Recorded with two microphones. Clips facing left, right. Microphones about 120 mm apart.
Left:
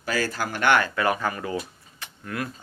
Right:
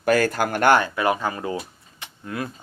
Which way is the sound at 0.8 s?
20° right (ahead or behind).